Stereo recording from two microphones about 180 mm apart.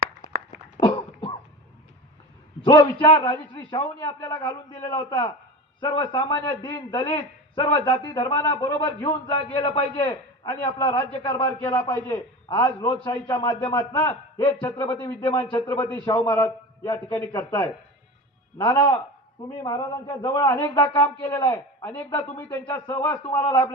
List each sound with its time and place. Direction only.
2.6 s a man's voice: 20° left (ahead or behind)
10.0 s a man's voice: 15° left (ahead or behind)